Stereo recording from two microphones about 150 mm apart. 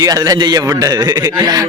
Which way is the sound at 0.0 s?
25° right (ahead or behind).